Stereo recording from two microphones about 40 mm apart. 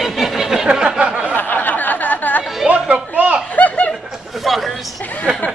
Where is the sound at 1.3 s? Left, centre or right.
Left.